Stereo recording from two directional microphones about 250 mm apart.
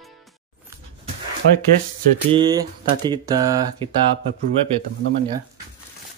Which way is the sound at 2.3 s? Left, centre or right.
Centre.